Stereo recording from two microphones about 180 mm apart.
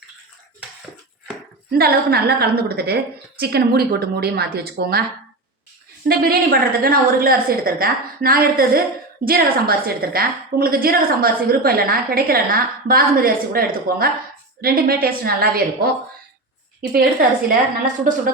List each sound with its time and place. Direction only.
1.7 s a woman's voice: 60° right (ahead or behind)
6.1 s a woman's voice: 55° right (ahead or behind)